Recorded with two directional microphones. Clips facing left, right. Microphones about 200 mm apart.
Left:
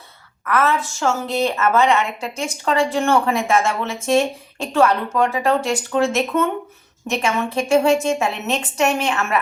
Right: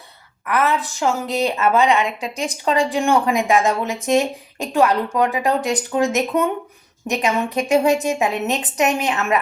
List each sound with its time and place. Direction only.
0.4 s a woman's voice: 15° right (ahead or behind)